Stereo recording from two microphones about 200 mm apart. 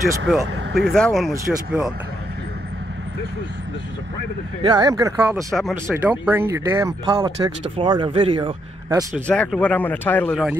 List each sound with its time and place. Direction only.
0.3 s speech: centre (ahead or behind)
4.6 s speech: 20° right (ahead or behind)
5.5 s speech: centre (ahead or behind); by 9.0 s 25° right (ahead or behind)
9.3 s speech: 5° left (ahead or behind)